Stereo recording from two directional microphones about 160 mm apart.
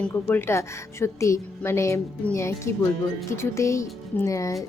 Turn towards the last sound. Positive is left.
turn(degrees=20)  # may be behind; listen again after turning